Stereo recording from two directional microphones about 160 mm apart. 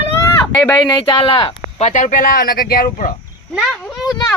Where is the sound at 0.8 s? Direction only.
25° left (ahead or behind); by 3.1 s 60° left (ahead or behind).